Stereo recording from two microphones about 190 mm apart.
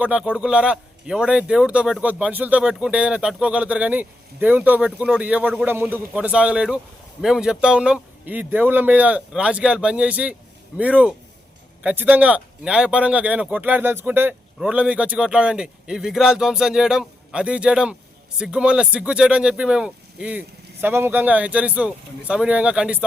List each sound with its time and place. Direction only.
0.0 s speech: 5° right (ahead or behind)